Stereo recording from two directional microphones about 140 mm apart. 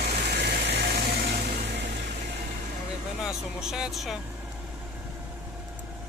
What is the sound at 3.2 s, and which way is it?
Speech, 5° right (ahead or behind).